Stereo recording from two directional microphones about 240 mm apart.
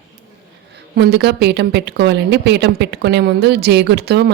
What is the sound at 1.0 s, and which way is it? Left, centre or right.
A woman's voice, right.